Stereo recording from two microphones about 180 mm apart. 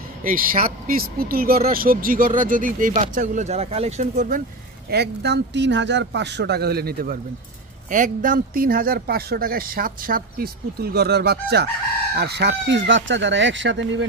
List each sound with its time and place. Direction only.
0.2 s speech: 50° right (ahead or behind)
4.8 s speech: 65° right (ahead or behind); by 14.0 s 90° right